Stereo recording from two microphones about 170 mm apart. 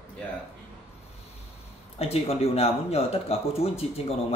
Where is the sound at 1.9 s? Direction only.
35° left (ahead or behind).